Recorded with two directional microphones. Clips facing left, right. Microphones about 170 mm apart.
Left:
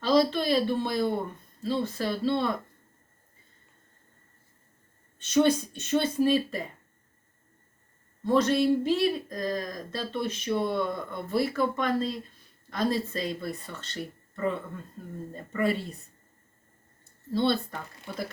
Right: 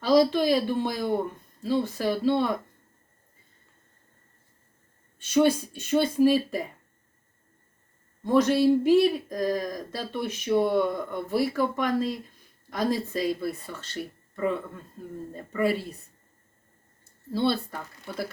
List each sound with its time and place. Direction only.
0.0 s speech: 10° right (ahead or behind)
5.2 s speech: 10° right (ahead or behind)
8.2 s speech: 15° right (ahead or behind)
17.3 s speech: 10° right (ahead or behind)